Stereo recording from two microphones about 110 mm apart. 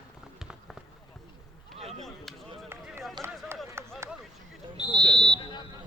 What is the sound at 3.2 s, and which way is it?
Run, 25° right (ahead or behind).